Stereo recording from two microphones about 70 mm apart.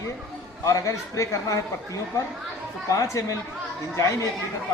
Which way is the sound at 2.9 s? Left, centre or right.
Left.